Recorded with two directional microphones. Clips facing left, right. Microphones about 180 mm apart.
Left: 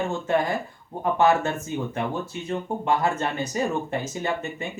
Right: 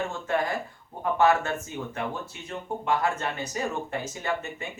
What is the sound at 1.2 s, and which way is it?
Speech, 25° left (ahead or behind).